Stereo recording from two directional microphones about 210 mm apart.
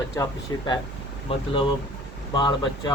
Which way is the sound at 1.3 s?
25° left (ahead or behind).